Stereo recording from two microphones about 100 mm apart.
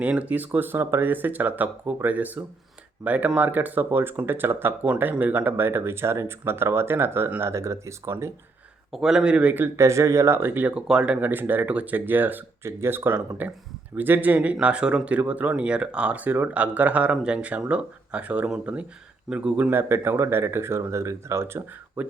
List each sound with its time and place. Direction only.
0.0 s speech: 15° right (ahead or behind)
8.9 s speech: 5° right (ahead or behind)
9.7 s speech: 30° right (ahead or behind); by 19.7 s 10° right (ahead or behind)
19.7 s speech: 25° right (ahead or behind)